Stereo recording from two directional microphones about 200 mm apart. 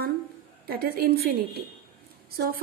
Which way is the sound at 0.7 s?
50° right (ahead or behind).